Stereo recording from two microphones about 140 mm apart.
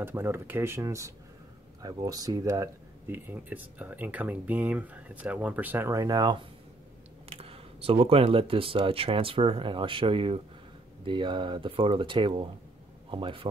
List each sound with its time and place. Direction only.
0.0 s speech: 15° right (ahead or behind)
7.2 s speech: 45° right (ahead or behind)